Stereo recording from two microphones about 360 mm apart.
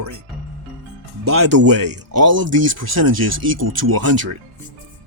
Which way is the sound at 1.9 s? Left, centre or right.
Right.